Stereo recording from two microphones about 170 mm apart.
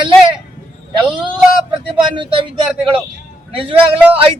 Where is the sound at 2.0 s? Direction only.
30° right (ahead or behind).